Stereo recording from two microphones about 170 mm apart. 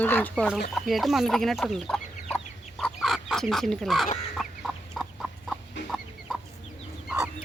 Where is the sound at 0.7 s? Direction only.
Centre (ahead or behind).